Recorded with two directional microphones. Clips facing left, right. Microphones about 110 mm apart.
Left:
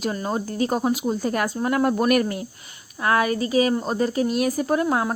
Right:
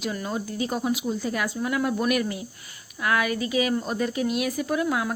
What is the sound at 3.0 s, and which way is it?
A woman's voice, 35° left (ahead or behind).